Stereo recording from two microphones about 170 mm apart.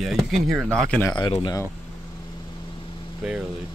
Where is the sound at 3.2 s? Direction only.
5° right (ahead or behind).